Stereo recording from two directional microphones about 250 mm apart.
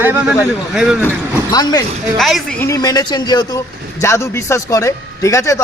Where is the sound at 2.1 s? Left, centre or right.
Centre.